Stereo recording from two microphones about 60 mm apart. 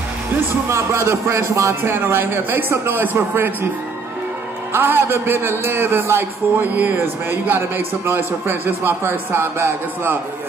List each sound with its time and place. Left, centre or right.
0.7 s speech: right
1.8 s a man's voice: right
4.7 s a man's voice: right